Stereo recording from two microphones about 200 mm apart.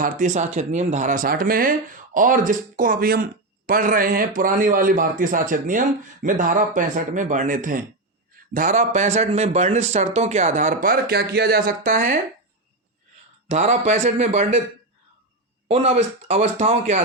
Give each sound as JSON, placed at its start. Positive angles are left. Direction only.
{"t": 0.0, "sound": "a man's voice", "side_deg": -35}
{"t": 13.5, "sound": "speech", "side_deg": -35}
{"t": 15.6, "sound": "speech", "side_deg": -30}